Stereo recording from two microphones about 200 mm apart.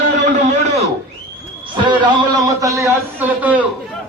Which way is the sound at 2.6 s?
15° right (ahead or behind).